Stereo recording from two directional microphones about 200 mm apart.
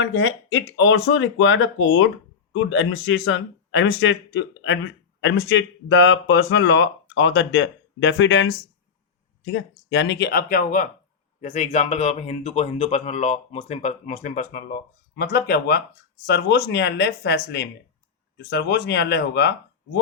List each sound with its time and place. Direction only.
0.0 s speech: 70° left (ahead or behind); by 2.0 s 90° left
2.5 s speech: 65° left (ahead or behind); by 10.8 s 45° left (ahead or behind)
11.3 s speech: 35° left (ahead or behind); by 20.0 s 60° left (ahead or behind)